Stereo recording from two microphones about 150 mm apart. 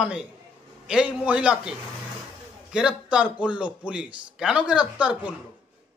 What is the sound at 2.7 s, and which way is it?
A man's voice, 5° right (ahead or behind).